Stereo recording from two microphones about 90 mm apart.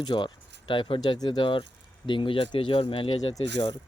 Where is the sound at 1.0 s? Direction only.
55° left (ahead or behind).